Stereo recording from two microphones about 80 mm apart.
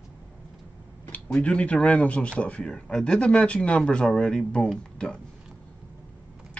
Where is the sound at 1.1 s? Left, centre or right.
Centre.